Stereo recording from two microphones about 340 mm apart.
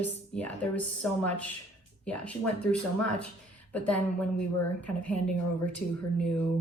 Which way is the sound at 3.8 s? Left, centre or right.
Centre.